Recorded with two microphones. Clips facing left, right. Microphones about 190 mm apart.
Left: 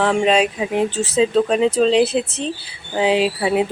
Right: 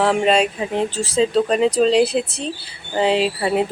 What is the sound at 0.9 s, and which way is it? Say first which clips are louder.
Speech: left 2 dB; 30° right (ahead or behind).